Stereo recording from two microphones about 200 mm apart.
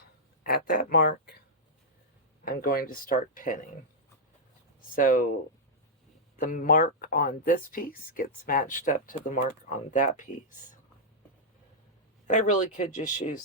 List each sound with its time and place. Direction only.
0.4 s speech: 50° left (ahead or behind)
2.4 s speech: 45° left (ahead or behind)
4.9 s speech: 40° left (ahead or behind)
6.3 s speech: 40° left (ahead or behind)
12.3 s speech: 40° left (ahead or behind)